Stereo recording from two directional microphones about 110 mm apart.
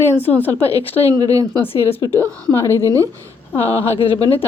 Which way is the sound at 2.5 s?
25° left (ahead or behind).